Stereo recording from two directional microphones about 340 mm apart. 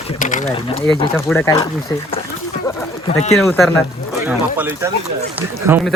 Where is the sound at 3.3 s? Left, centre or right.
Centre.